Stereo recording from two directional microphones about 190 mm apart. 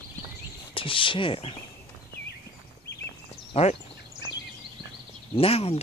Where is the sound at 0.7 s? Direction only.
25° left (ahead or behind).